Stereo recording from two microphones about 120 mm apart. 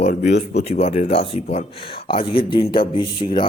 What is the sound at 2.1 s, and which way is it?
Speech, 45° left (ahead or behind).